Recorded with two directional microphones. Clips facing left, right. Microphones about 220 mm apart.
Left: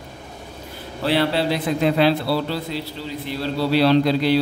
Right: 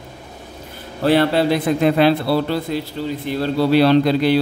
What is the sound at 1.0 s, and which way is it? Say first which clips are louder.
A man's voice: right 5 dB; 50° right (ahead or behind).